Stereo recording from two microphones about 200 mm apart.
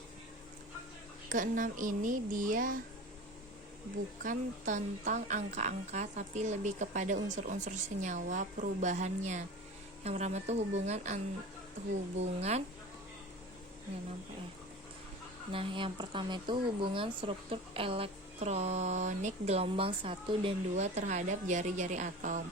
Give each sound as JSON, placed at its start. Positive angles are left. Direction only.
{"t": 1.3, "sound": "speech", "side_deg": -40}
{"t": 4.2, "sound": "speech", "side_deg": -40}
{"t": 15.5, "sound": "speech", "side_deg": -25}